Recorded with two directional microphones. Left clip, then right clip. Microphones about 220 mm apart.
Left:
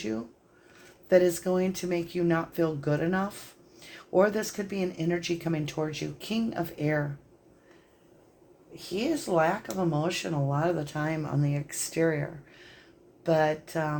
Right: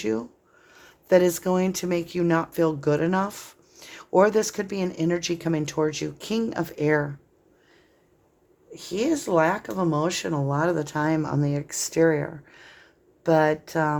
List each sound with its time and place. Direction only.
0.0 s speech: 40° right (ahead or behind)
8.7 s speech: 45° right (ahead or behind)